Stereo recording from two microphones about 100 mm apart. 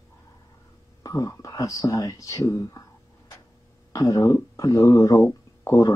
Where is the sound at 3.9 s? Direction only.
35° left (ahead or behind).